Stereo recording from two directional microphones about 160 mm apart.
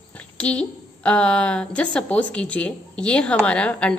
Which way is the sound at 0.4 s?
5° left (ahead or behind).